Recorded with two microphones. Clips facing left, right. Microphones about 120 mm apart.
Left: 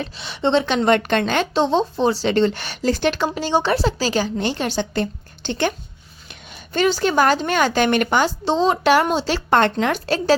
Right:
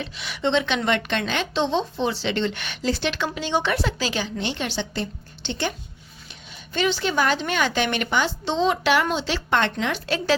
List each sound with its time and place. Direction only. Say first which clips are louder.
0.2 s a woman's voice: left 4 dB; 30° left (ahead or behind)